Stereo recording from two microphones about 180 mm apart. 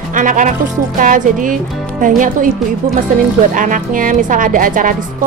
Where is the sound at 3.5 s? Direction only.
45° right (ahead or behind).